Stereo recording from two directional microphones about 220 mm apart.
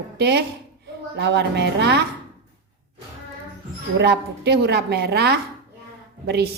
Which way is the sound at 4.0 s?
50° right (ahead or behind).